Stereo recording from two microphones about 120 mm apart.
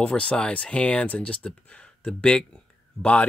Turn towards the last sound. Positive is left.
turn(degrees=10)  # may be behind; listen again after turning